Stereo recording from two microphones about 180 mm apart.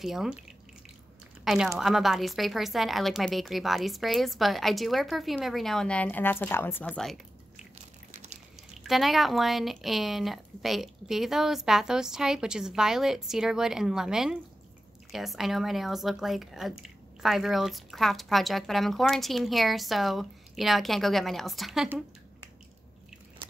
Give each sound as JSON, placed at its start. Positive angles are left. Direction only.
{"t": 0.0, "sound": "a woman's voice", "side_deg": -5}
{"t": 1.4, "sound": "a woman's voice", "side_deg": 0}
{"t": 8.1, "sound": "a sound", "side_deg": -40}
{"t": 8.8, "sound": "a woman's voice", "side_deg": 0}